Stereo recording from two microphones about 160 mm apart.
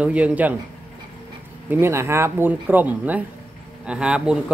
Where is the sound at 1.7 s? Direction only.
15° right (ahead or behind).